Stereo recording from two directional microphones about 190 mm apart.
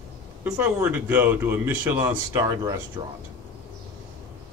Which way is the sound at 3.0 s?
25° right (ahead or behind).